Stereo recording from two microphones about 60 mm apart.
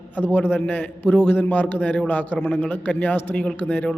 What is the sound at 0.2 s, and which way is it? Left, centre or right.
A man's voice, left.